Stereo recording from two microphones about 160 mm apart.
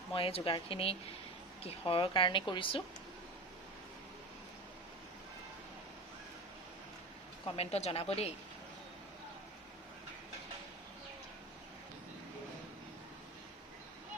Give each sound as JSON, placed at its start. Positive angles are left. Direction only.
{"t": 0.1, "sound": "a woman's voice", "side_deg": 35}
{"t": 7.4, "sound": "a woman's voice", "side_deg": 40}